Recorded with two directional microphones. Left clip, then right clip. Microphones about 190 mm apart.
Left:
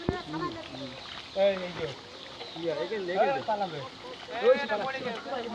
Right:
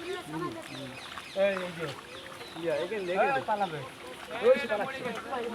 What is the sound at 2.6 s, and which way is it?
A man's voice, 40° left (ahead or behind).